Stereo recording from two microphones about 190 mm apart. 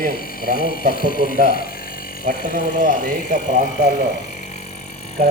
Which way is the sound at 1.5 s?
50° left (ahead or behind).